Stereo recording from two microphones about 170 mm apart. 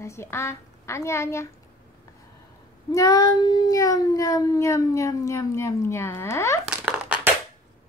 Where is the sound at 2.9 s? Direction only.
20° left (ahead or behind).